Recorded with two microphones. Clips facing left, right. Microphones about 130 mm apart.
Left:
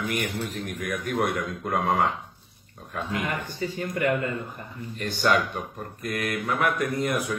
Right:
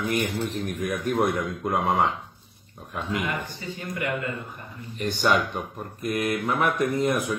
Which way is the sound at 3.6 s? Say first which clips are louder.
Left 9 dB; 45° left (ahead or behind).